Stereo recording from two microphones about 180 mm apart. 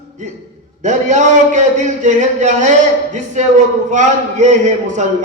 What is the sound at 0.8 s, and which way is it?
A man's voice, 40° right (ahead or behind).